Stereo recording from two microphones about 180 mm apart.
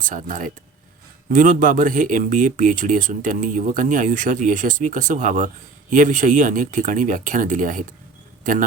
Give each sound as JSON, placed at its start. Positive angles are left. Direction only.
{"t": 0.0, "sound": "speech", "side_deg": -45}